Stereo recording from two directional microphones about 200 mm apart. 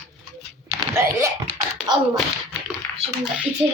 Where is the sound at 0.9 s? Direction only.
15° right (ahead or behind).